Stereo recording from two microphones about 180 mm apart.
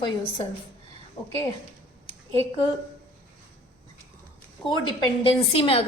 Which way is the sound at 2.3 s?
15° left (ahead or behind).